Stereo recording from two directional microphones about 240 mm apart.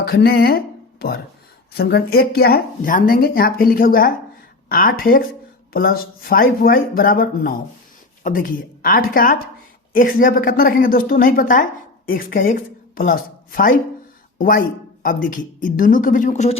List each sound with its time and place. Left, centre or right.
0.0 s a woman's voice: left